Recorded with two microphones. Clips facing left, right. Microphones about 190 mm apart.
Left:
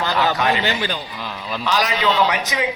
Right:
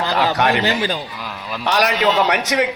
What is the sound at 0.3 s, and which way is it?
Speech, 65° right (ahead or behind).